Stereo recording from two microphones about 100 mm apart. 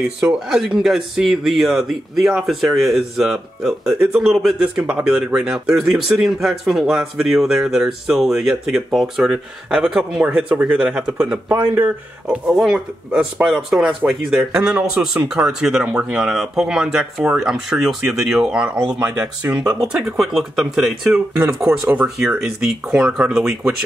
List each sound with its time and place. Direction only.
0.2 s speech: 5° right (ahead or behind)
11.4 s speech: 20° right (ahead or behind)
12.4 s speech: 5° right (ahead or behind)